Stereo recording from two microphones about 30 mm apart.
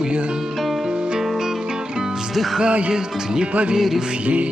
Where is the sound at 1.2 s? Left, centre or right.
Centre.